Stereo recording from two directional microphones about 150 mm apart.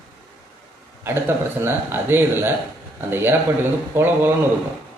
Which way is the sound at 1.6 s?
15° right (ahead or behind).